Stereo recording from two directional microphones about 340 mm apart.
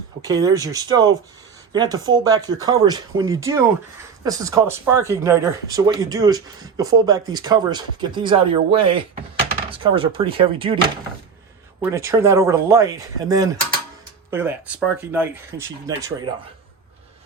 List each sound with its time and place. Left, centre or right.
0.2 s speech: centre
11.8 s speech: centre